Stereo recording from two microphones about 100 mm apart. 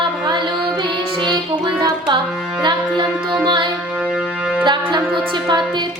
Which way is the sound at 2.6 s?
50° right (ahead or behind).